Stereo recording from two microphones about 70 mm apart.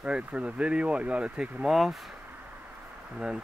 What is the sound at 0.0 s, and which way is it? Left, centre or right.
Speech, centre.